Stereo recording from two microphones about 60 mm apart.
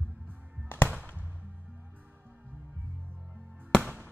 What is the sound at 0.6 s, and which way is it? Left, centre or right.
Music, left.